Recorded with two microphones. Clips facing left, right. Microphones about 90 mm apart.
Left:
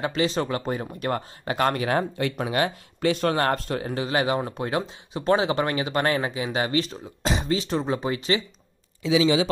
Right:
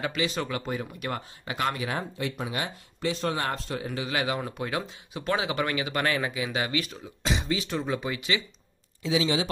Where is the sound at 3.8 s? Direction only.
35° left (ahead or behind).